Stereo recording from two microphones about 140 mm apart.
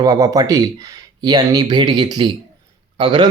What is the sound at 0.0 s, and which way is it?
A man's voice, 25° right (ahead or behind).